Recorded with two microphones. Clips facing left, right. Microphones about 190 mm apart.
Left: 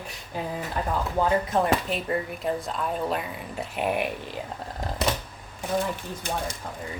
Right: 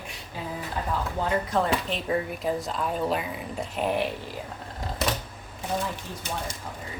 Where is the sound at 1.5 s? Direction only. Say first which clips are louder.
Left 1 dB; 15° left (ahead or behind).